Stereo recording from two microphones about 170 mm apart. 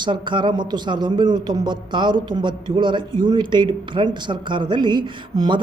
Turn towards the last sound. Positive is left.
turn(degrees=-25)  # may be behind; listen again after turning